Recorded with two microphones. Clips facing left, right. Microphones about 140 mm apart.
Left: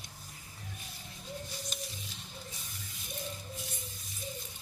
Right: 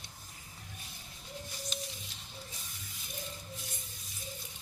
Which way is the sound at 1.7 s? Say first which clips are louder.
Right 1 dB; 45° left (ahead or behind).